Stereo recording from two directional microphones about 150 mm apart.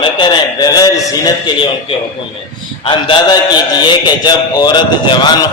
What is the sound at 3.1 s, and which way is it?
A man's voice, 30° left (ahead or behind).